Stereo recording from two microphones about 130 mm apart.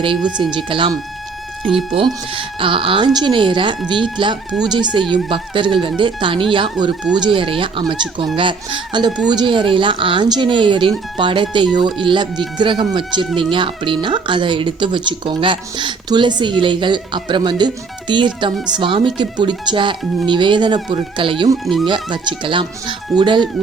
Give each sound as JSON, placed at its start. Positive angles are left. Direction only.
{"t": 0.5, "sound": "speech", "side_deg": -40}